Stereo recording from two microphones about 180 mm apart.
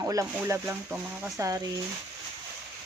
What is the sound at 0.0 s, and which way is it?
Speech, 20° right (ahead or behind).